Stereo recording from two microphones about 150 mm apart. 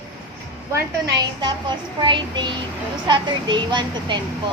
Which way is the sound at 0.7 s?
25° right (ahead or behind).